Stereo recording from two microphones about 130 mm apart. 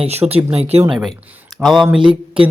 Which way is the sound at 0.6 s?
50° right (ahead or behind).